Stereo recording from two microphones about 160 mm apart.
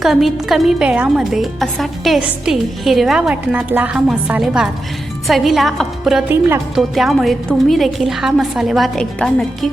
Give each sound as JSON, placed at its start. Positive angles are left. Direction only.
{"t": 0.0, "sound": "a woman's voice", "side_deg": 0}